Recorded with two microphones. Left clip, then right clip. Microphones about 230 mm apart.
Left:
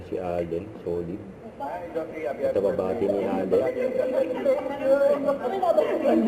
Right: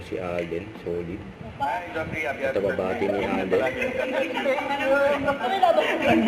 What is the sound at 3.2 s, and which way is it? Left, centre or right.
A man's voice, centre.